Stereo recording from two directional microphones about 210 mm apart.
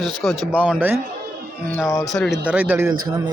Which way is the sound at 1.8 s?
15° left (ahead or behind).